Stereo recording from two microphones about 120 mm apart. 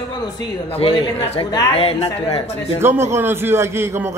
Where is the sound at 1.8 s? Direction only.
50° left (ahead or behind).